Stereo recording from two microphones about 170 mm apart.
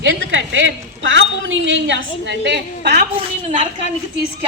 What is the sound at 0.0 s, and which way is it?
A woman's voice, 90° right.